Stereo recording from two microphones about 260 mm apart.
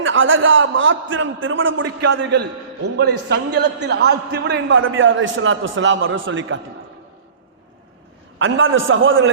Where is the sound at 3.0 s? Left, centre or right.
Right.